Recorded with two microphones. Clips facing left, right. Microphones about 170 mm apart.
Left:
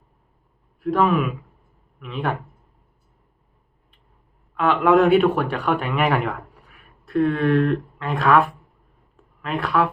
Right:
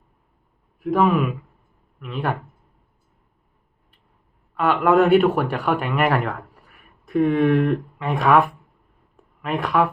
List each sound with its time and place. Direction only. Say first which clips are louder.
0.9 s speech: right 1 dB; 5° right (ahead or behind)
4.5 s speech: even; 5° right (ahead or behind)